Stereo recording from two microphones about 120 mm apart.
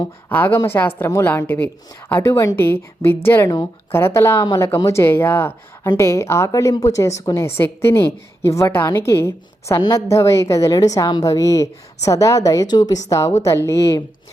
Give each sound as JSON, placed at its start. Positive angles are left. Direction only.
{"t": 0.3, "sound": "a woman's voice", "side_deg": 15}